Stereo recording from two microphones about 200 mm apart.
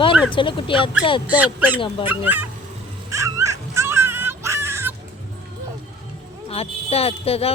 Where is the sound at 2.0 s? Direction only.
10° right (ahead or behind).